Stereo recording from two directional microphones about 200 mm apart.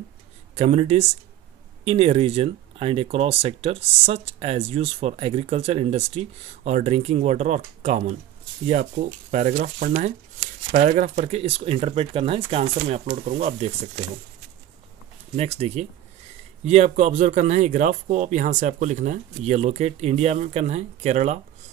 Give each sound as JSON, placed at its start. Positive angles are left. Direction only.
{"t": 0.6, "sound": "speech", "side_deg": -30}
{"t": 12.7, "sound": "speech", "side_deg": -40}
{"t": 15.3, "sound": "speech", "side_deg": -30}